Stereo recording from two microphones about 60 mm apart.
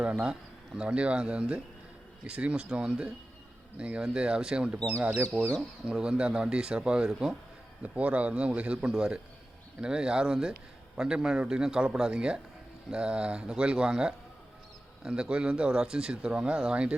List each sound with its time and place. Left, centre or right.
0.0 s speech: right
5.8 s speech: centre
7.8 s speech: right
8.9 s speech: centre